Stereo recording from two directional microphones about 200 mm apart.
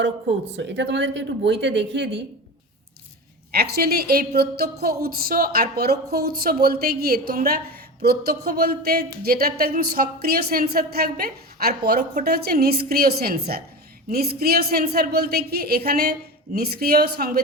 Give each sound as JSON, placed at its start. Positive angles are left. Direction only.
{"t": 0.0, "sound": "speech", "side_deg": -60}
{"t": 3.5, "sound": "a woman's voice", "side_deg": -50}